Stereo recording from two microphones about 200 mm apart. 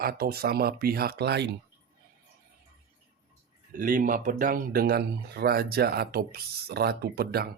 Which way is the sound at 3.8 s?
45° right (ahead or behind).